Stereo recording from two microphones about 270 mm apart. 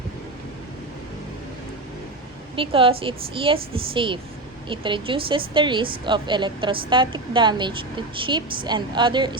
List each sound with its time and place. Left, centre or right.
2.6 s a woman's voice: centre